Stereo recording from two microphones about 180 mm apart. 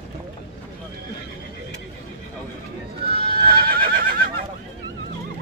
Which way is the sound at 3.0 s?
60° right (ahead or behind).